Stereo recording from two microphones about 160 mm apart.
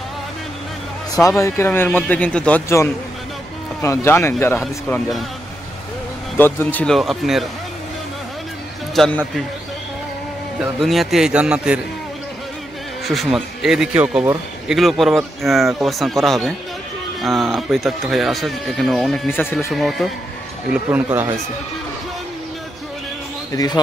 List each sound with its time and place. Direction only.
1.1 s speech: 20° left (ahead or behind)
3.8 s speech: 15° left (ahead or behind)
6.3 s speech: 10° left (ahead or behind)
7.0 s speech: centre (ahead or behind)
8.9 s speech: centre (ahead or behind)
10.8 s speech: centre (ahead or behind)
13.0 s speech: centre (ahead or behind)
19.2 s speech: 15° left (ahead or behind)
19.7 s speech: centre (ahead or behind)
20.7 s speech: 10° right (ahead or behind)
23.5 s speech: 25° left (ahead or behind)